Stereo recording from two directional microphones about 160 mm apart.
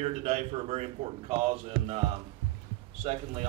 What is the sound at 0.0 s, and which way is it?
A man's voice, 40° right (ahead or behind).